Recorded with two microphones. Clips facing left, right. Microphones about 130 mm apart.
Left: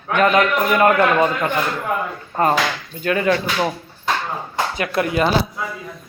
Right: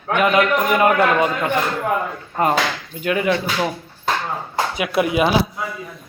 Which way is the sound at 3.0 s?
15° right (ahead or behind).